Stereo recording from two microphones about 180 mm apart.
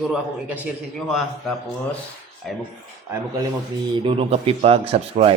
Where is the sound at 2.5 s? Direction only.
5° left (ahead or behind).